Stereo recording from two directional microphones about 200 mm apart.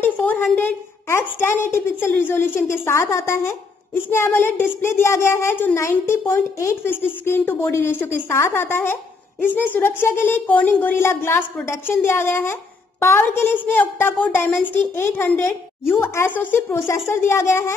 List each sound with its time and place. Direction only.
0.0 s a woman's voice: 10° left (ahead or behind)